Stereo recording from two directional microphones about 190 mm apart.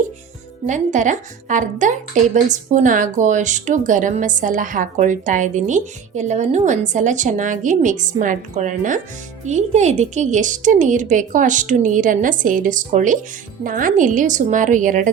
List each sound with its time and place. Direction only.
0.7 s a woman's voice: 40° right (ahead or behind)